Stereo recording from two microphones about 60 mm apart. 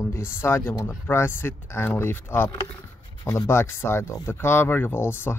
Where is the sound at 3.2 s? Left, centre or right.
Left.